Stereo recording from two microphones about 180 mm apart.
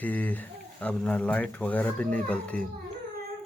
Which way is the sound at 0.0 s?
10° left (ahead or behind).